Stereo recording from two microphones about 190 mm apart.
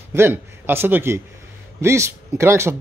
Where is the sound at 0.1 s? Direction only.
10° right (ahead or behind).